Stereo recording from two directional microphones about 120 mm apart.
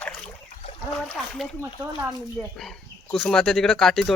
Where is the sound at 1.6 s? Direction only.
20° right (ahead or behind).